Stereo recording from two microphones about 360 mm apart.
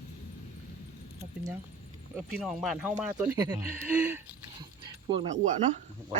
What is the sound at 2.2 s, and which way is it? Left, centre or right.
Speech, centre.